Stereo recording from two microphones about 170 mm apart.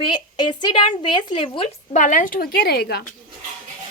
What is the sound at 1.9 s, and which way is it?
A woman's voice, 45° left (ahead or behind).